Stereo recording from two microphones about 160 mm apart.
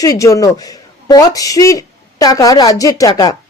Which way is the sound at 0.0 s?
20° left (ahead or behind).